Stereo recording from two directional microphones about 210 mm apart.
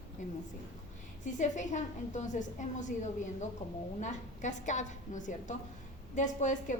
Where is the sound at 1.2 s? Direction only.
35° left (ahead or behind).